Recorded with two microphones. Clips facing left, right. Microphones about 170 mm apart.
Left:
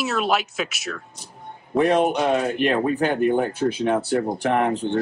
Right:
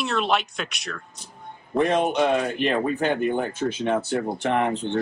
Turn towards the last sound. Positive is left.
turn(degrees=5)  # may be behind; listen again after turning